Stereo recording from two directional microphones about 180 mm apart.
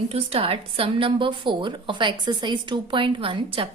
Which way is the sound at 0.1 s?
35° right (ahead or behind).